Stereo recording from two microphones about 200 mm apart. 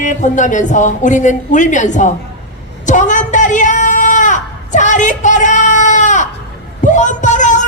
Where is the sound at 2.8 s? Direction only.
40° left (ahead or behind).